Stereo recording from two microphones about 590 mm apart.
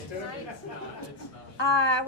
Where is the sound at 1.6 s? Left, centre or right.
Left.